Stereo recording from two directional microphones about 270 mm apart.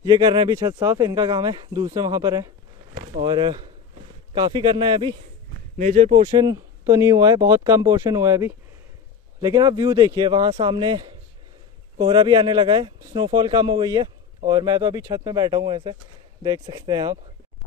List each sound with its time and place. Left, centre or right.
0.0 s speech: centre